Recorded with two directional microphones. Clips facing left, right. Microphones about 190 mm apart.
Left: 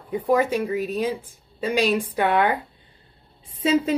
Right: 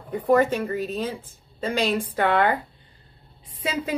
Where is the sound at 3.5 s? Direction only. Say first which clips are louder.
Left 8 dB; 25° left (ahead or behind).